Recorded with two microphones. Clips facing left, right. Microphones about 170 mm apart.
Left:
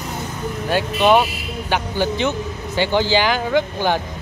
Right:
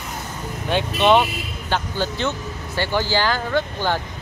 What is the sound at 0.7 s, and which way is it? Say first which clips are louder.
A man's voice: left 1 dB; 5° left (ahead or behind).